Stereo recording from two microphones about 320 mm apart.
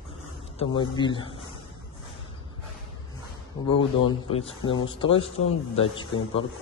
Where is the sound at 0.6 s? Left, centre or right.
Centre.